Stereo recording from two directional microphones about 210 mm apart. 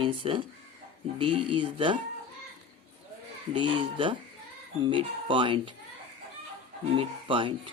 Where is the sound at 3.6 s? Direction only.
25° right (ahead or behind).